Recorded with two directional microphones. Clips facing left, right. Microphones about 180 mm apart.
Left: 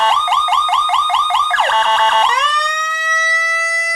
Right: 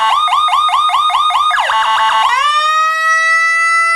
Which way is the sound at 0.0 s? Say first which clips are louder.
Even; 30° left (ahead or behind).